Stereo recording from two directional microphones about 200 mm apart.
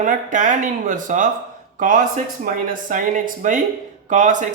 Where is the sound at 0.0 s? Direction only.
40° right (ahead or behind).